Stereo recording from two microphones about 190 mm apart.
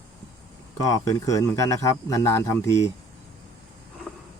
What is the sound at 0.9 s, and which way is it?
Speech, 15° left (ahead or behind).